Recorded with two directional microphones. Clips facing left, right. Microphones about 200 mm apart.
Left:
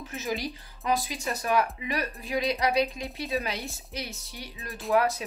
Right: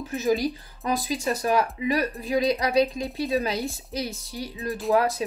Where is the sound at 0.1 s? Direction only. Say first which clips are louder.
Right 9 dB; 35° right (ahead or behind).